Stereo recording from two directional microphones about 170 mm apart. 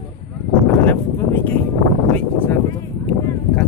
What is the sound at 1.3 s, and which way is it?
Speech, 10° left (ahead or behind).